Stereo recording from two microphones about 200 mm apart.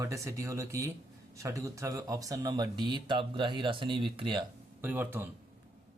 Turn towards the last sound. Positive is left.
turn(degrees=-10)  # may be behind; listen again after turning